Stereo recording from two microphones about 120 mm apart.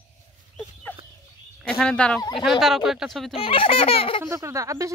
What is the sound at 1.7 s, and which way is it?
Speech, 10° left (ahead or behind).